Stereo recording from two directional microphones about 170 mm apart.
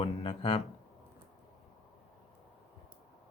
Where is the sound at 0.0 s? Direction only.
35° left (ahead or behind).